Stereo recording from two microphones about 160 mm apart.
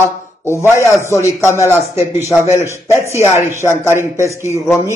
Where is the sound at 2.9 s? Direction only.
15° right (ahead or behind).